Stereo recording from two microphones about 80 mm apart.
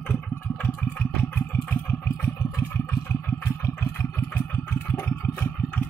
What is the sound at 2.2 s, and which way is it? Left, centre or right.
Vehicle, left.